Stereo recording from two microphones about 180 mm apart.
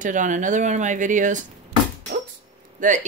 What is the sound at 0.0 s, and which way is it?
Speech, 45° right (ahead or behind).